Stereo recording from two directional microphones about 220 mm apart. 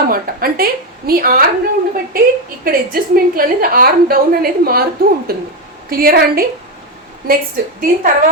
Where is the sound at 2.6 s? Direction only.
40° right (ahead or behind).